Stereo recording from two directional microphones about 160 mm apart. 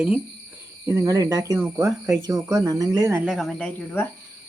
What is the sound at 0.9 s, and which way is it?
Speech, 20° right (ahead or behind).